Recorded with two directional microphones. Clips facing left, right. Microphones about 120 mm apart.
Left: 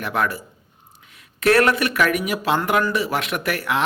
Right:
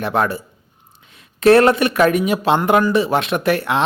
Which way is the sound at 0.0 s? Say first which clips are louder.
Right 4 dB; 30° right (ahead or behind).